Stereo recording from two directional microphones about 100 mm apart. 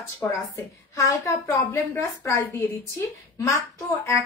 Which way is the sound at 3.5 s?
30° left (ahead or behind).